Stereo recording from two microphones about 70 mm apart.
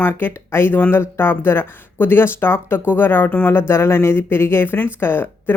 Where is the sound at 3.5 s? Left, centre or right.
Left.